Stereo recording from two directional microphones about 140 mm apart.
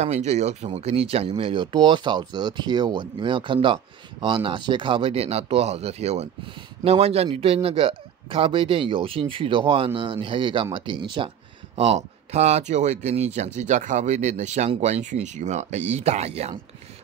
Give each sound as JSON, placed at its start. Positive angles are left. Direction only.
{"t": 0.0, "sound": "speech", "side_deg": -50}